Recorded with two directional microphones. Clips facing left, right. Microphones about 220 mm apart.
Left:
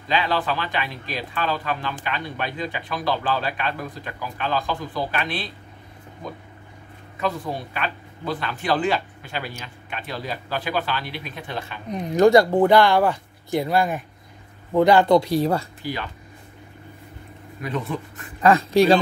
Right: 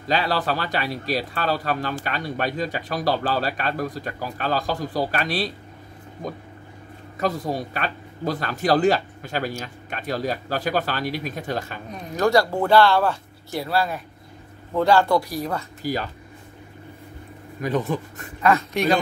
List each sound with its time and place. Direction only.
0.1 s speech: 40° right (ahead or behind)
7.2 s speech: 40° right (ahead or behind)
11.9 s speech: 20° left (ahead or behind)
15.8 s speech: 40° right (ahead or behind)
17.6 s speech: 40° right (ahead or behind)
18.4 s speech: 30° left (ahead or behind)